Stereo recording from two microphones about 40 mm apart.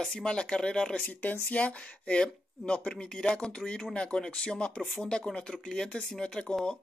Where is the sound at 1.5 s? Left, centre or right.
Left.